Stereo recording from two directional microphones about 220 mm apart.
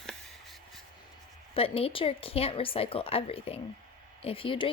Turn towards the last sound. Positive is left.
turn(degrees=25)  # may be behind; listen again after turning